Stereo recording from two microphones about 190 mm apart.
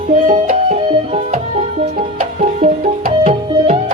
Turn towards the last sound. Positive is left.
turn(degrees=-40)  # may be behind; listen again after turning